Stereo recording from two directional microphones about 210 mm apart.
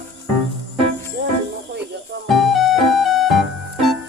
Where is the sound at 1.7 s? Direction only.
55° right (ahead or behind).